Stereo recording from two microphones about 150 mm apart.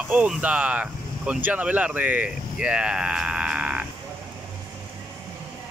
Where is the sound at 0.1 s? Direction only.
10° right (ahead or behind).